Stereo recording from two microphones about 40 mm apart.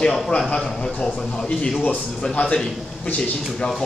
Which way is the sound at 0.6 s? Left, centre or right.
Centre.